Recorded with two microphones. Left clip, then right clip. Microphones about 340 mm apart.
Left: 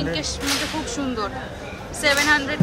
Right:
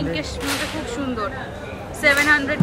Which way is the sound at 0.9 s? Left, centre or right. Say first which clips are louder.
Right 1 dB; centre.